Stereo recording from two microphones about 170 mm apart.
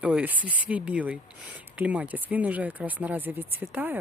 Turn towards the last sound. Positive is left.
turn(degrees=-10)  # may be behind; listen again after turning